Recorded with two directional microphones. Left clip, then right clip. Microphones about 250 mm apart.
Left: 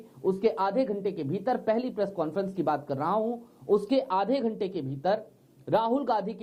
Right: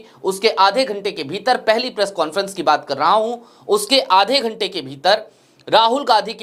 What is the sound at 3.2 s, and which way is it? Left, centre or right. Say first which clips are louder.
Speech: right 9 dB; right.